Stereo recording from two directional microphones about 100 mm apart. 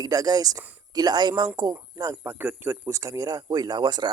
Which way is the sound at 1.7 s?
30° right (ahead or behind).